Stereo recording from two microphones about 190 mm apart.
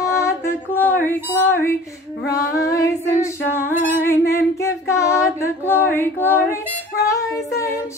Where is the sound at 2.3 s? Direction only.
15° left (ahead or behind).